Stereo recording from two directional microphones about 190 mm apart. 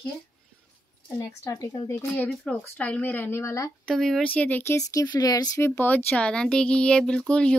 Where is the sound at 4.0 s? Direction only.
Centre (ahead or behind).